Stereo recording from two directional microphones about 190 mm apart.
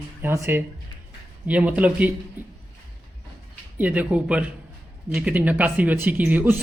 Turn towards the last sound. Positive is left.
turn(degrees=-10)  # may be behind; listen again after turning